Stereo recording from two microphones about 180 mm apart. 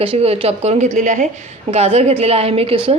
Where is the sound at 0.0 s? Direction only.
30° right (ahead or behind).